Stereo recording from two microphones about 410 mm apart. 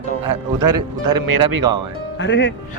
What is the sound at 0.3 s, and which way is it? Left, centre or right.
Speech, right.